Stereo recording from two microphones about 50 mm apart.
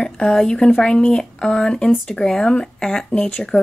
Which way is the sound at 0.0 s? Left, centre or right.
Centre.